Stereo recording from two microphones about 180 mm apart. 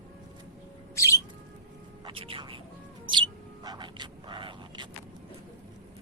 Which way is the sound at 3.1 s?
25° right (ahead or behind).